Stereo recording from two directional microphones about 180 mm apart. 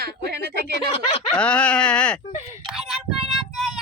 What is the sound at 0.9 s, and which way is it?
Speech, 35° left (ahead or behind).